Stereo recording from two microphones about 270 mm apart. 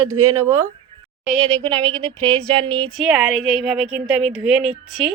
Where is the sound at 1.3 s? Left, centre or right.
Centre.